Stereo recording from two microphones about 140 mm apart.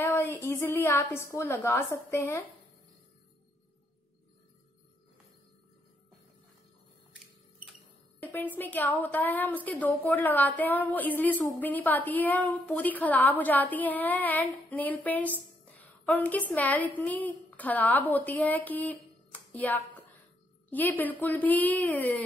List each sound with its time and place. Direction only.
0.0 s a woman's voice: 15° left (ahead or behind)
8.2 s a woman's voice: 10° left (ahead or behind)
19.5 s music: 10° left (ahead or behind)
20.7 s a woman's voice: 10° left (ahead or behind)